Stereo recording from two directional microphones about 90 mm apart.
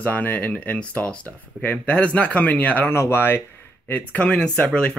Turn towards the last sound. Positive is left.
turn(degrees=10)  # may be behind; listen again after turning